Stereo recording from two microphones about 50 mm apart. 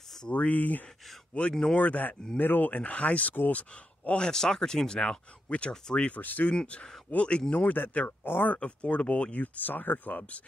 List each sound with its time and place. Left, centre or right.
0.3 s speech: left
1.5 s speech: centre
1.8 s speech: left
4.2 s speech: centre
6.0 s speech: left
6.5 s speech: centre
7.5 s speech: left
8.5 s speech: left